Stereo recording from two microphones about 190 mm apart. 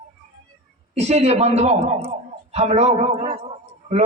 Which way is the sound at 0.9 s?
35° right (ahead or behind).